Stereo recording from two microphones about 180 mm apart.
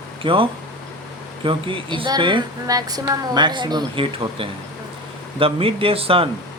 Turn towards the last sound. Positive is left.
turn(degrees=-30)  # may be behind; listen again after turning